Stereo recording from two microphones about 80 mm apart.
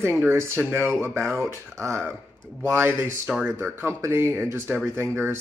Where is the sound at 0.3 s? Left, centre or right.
Right.